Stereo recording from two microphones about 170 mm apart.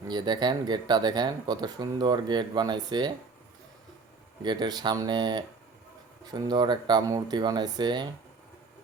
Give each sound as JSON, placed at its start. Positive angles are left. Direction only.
{"t": 0.1, "sound": "speech", "side_deg": -25}
{"t": 4.4, "sound": "speech", "side_deg": -25}